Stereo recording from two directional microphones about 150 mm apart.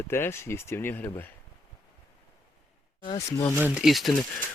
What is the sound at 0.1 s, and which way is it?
Speech, 15° left (ahead or behind).